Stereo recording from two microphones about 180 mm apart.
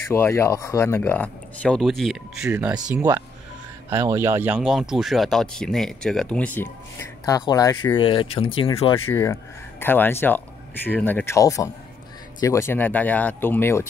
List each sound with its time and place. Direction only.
0.1 s speech: 15° left (ahead or behind); by 3.0 s 5° right (ahead or behind)
3.0 s speech: 15° right (ahead or behind); by 9.0 s 30° left (ahead or behind)
9.1 s speech: 15° left (ahead or behind)